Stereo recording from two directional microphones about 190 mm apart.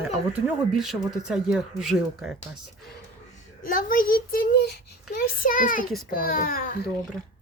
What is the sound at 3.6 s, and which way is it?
A child's voice, 45° left (ahead or behind).